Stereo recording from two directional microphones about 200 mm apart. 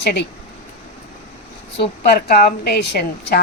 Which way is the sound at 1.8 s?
50° left (ahead or behind).